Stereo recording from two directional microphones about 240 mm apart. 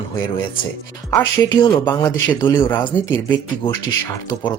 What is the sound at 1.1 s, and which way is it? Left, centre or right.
Speech, centre.